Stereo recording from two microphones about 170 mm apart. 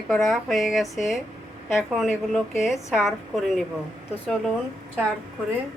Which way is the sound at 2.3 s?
Centre (ahead or behind).